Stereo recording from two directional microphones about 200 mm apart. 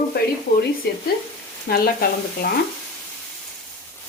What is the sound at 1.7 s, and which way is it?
Frying, 50° left (ahead or behind).